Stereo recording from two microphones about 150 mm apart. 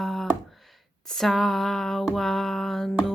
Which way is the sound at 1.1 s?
Centre (ahead or behind).